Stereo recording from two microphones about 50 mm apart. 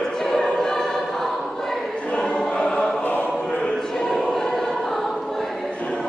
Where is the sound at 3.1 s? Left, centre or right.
Left.